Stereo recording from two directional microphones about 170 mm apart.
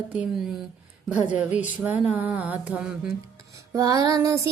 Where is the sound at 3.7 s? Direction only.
20° right (ahead or behind).